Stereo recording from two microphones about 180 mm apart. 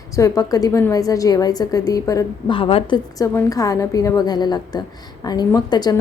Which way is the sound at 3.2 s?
20° left (ahead or behind).